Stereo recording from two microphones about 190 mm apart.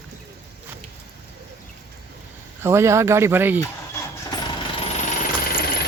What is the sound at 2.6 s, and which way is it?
Speech, 15° right (ahead or behind).